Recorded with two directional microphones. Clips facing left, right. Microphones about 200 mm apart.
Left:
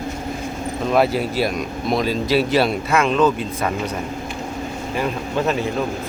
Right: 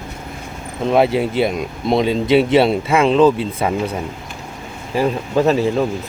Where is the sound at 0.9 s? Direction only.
25° right (ahead or behind).